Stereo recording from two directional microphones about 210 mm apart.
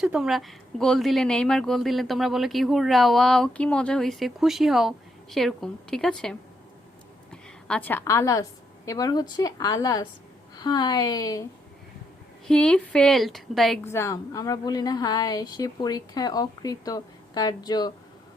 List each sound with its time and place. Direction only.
0.0 s a woman's voice: centre (ahead or behind); by 11.4 s 20° left (ahead or behind)
12.5 s speech: 5° left (ahead or behind)
13.8 s a woman's voice: 15° left (ahead or behind)